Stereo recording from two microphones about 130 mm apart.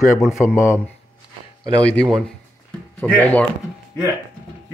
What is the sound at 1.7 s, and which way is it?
Speech, 10° left (ahead or behind).